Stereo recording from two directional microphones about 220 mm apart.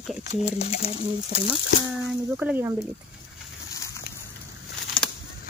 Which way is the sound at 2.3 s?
10° right (ahead or behind).